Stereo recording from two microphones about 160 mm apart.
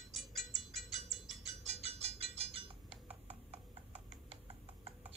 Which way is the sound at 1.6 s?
40° right (ahead or behind).